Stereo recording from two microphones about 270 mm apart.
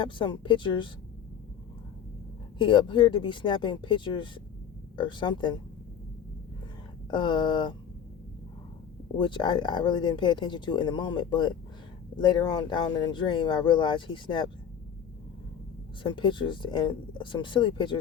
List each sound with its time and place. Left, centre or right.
0.0 s speech: centre
2.6 s speech: centre
7.1 s speech: centre
9.1 s speech: centre
16.0 s speech: centre